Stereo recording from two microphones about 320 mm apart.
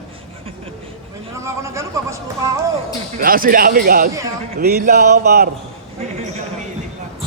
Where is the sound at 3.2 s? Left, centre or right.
Right.